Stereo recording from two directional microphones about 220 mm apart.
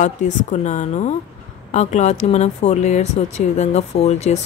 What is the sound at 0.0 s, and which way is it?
Speech, 35° left (ahead or behind).